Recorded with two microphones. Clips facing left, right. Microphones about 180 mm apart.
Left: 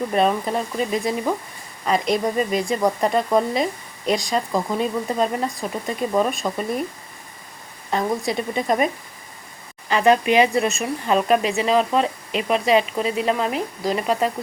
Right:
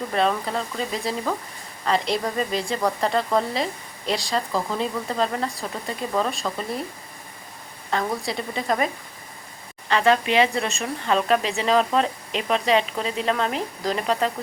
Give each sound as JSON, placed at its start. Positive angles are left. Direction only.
{"t": 0.1, "sound": "speech", "side_deg": 15}
{"t": 2.5, "sound": "speech", "side_deg": 15}
{"t": 7.9, "sound": "a woman's voice", "side_deg": 20}
{"t": 9.9, "sound": "speech", "side_deg": 15}